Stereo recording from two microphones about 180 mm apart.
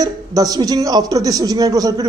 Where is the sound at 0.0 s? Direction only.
20° right (ahead or behind).